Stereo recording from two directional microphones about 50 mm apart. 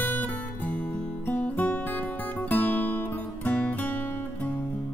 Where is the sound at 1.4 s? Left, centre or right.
Left.